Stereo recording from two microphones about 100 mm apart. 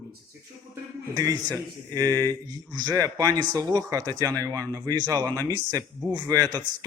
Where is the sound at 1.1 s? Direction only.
40° right (ahead or behind).